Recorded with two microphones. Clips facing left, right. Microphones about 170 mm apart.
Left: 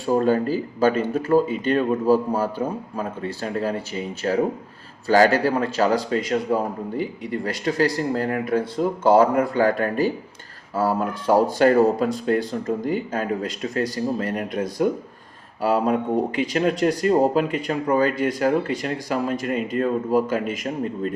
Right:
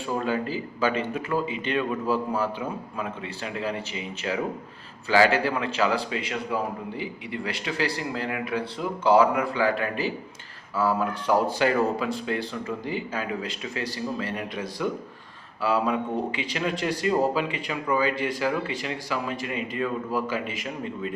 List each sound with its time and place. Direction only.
0.0 s a man's voice: 40° left (ahead or behind)